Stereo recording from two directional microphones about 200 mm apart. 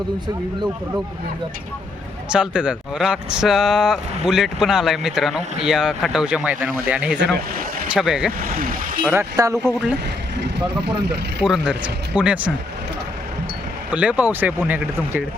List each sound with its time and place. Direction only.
2.3 s speech: 5° right (ahead or behind)
8.5 s speech: 45° right (ahead or behind)
9.0 s speech: 15° right (ahead or behind)
9.6 s speech: 5° right (ahead or behind)
10.3 s speech: 60° right (ahead or behind)
11.4 s speech: 5° right (ahead or behind)
13.9 s speech: 5° right (ahead or behind)